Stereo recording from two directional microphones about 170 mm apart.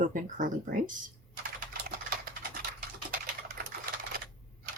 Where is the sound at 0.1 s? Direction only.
50° right (ahead or behind).